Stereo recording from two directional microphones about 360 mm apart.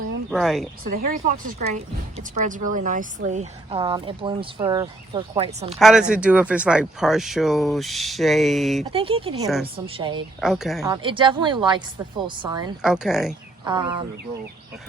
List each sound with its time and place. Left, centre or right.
0.3 s speech: centre
0.9 s speech: right
5.8 s speech: centre
8.9 s speech: centre
10.4 s speech: centre
13.7 s speech: centre